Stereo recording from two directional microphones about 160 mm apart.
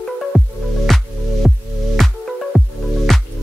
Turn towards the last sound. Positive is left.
turn(degrees=0)  # may be behind; listen again after turning